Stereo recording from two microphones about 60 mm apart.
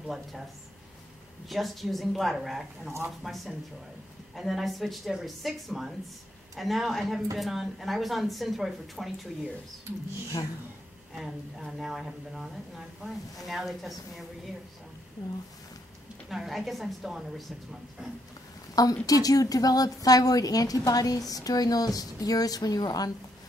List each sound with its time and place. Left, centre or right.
0.0 s speech: centre
1.5 s speech: centre
11.1 s speech: centre
16.3 s speech: centre
19.0 s a woman's voice: left